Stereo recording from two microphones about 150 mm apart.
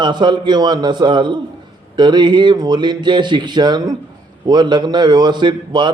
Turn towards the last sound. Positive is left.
turn(degrees=-30)  # may be behind; listen again after turning